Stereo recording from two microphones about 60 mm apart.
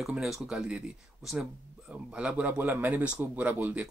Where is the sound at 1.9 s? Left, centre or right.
Centre.